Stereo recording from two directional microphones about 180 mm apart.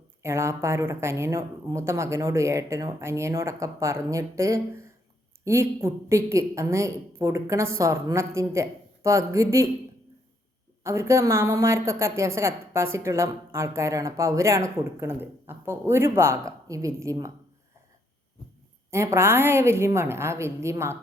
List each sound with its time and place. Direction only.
0.2 s a woman's voice: 15° right (ahead or behind)
10.8 s a woman's voice: 15° right (ahead or behind)
18.9 s a woman's voice: 15° right (ahead or behind)